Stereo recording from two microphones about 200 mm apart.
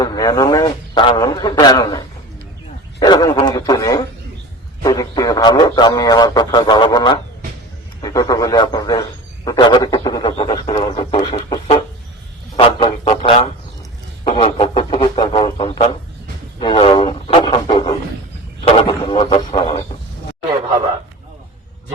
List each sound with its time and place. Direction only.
0.0 s a man's voice: 20° left (ahead or behind)
3.0 s a man's voice: 20° left (ahead or behind)
12.5 s music: 25° left (ahead or behind)
14.3 s a sound: 25° left (ahead or behind)